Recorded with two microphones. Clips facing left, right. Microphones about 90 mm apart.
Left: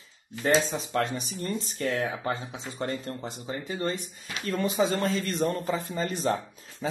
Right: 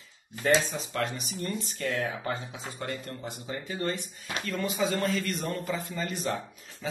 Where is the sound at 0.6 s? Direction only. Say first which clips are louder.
Left 3 dB; 25° left (ahead or behind).